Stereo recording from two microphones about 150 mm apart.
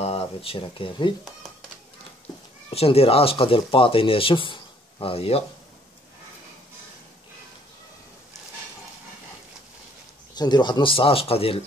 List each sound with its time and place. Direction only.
0.0 s speech: 40° left (ahead or behind)
2.7 s speech: 40° left (ahead or behind)
10.3 s speech: 30° left (ahead or behind)